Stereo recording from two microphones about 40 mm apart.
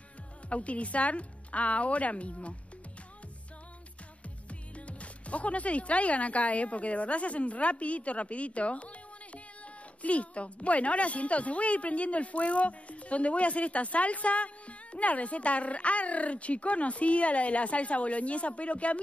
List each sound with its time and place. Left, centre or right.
0.5 s a woman's voice: left
4.5 s a woman's voice: left